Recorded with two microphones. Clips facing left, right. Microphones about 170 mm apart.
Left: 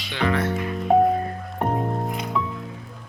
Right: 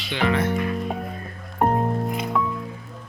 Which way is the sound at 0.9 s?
45° left (ahead or behind).